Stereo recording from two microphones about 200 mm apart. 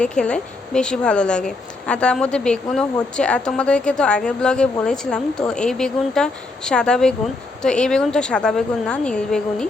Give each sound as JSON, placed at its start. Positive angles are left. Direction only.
{"t": 0.0, "sound": "speech", "side_deg": 5}